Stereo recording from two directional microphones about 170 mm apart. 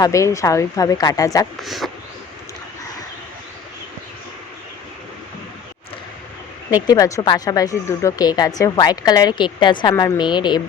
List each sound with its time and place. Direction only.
0.0 s a woman's voice: 20° left (ahead or behind)
1.6 s speech: centre (ahead or behind)
6.7 s a woman's voice: 20° left (ahead or behind)